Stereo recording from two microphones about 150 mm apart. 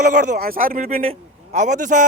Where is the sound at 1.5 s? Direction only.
55° right (ahead or behind).